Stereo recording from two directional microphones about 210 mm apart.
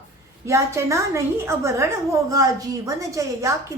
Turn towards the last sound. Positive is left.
turn(degrees=-15)  # may be behind; listen again after turning